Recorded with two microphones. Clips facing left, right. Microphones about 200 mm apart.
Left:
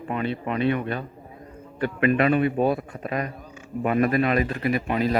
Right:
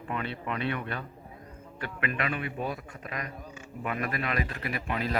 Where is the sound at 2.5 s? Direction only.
65° left (ahead or behind).